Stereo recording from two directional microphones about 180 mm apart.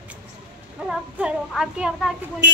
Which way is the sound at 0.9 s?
5° right (ahead or behind).